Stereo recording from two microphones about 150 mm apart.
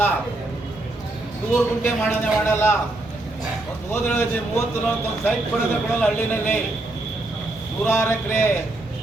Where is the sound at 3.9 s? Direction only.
15° left (ahead or behind).